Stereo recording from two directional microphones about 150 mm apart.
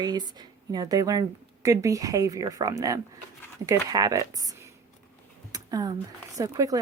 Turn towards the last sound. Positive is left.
turn(degrees=-25)  # may be behind; listen again after turning